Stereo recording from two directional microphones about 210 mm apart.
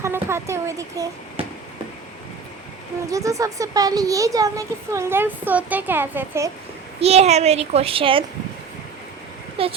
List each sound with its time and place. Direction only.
0.0 s speech: 10° right (ahead or behind)
3.1 s speech: 15° right (ahead or behind)
7.0 s a child's voice: 30° right (ahead or behind)
9.6 s a child's voice: 25° right (ahead or behind)